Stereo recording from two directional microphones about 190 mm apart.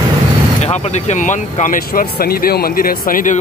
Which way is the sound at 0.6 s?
35° left (ahead or behind).